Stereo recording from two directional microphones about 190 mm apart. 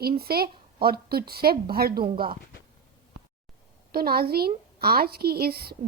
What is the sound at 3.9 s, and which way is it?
A woman's voice, 55° right (ahead or behind).